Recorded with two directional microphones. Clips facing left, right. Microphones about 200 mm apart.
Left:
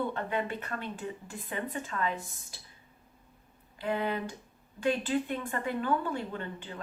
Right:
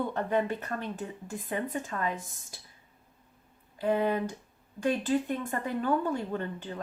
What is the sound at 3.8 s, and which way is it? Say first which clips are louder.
Speech: right 4 dB; 40° right (ahead or behind).